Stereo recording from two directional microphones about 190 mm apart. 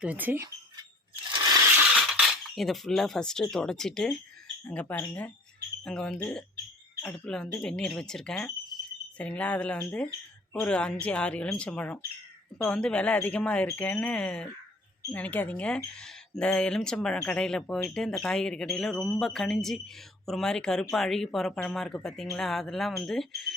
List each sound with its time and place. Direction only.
0.0 s speech: 10° right (ahead or behind)
1.3 s a sound: 20° right (ahead or behind)
1.8 s speech: 5° right (ahead or behind)